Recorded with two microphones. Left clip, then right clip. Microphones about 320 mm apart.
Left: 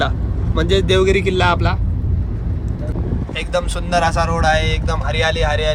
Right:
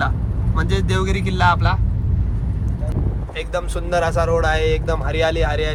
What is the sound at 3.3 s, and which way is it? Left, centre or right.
Speech, centre.